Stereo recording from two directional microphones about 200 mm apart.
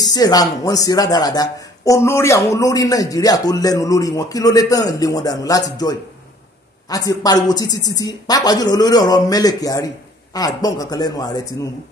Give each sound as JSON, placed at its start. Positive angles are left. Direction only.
{"t": 0.0, "sound": "a man's voice", "side_deg": 20}